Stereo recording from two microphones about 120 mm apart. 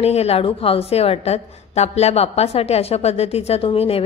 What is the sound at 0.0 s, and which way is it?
A woman's voice, 60° left (ahead or behind).